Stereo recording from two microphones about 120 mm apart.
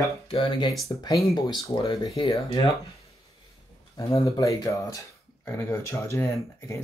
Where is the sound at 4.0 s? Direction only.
25° left (ahead or behind).